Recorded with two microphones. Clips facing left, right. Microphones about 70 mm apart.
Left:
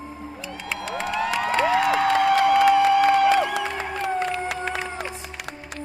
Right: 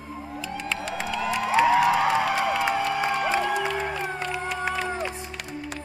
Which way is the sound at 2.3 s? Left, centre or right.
Left.